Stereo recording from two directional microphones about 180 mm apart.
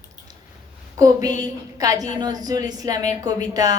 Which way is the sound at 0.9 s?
20° right (ahead or behind).